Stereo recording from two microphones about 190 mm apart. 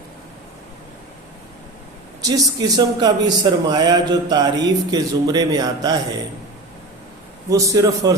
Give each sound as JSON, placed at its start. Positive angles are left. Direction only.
{"t": 2.2, "sound": "a man's voice", "side_deg": -20}
{"t": 7.5, "sound": "a man's voice", "side_deg": -20}